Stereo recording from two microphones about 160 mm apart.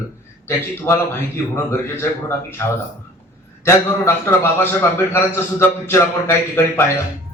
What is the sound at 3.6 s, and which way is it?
Speech, 15° left (ahead or behind).